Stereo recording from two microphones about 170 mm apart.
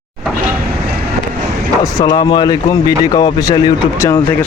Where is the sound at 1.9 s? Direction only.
25° left (ahead or behind).